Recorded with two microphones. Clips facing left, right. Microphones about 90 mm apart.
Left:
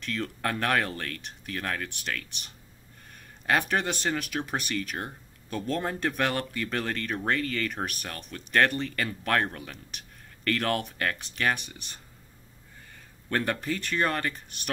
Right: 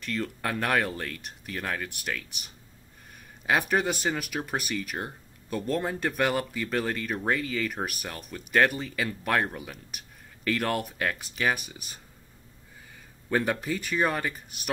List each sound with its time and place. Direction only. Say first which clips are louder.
0.0 s speech: even; centre (ahead or behind)
13.3 s speech: right 2 dB; 5° right (ahead or behind)